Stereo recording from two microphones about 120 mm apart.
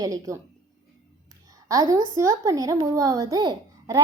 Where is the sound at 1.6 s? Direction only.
30° right (ahead or behind).